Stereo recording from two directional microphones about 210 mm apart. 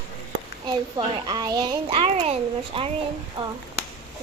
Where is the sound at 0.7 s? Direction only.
20° right (ahead or behind).